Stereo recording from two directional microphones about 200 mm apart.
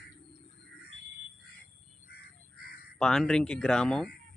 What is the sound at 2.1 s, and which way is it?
Crow, 50° left (ahead or behind).